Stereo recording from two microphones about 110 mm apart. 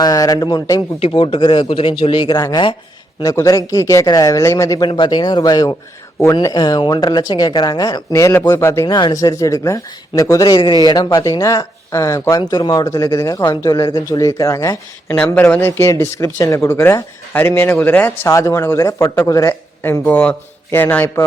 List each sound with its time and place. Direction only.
0.0 s speech: 35° left (ahead or behind)
0.9 s speech: 50° left (ahead or behind); by 4.9 s 30° left (ahead or behind)
4.9 s speech: 45° left (ahead or behind)
8.1 s speech: 25° left (ahead or behind)
15.1 s speech: 15° left (ahead or behind)
18.3 s speech: 30° left (ahead or behind)